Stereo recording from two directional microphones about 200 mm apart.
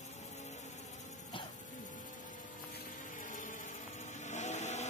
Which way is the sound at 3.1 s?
40° left (ahead or behind).